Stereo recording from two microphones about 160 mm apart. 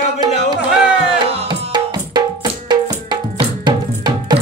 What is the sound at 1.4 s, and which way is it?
Music, 30° right (ahead or behind).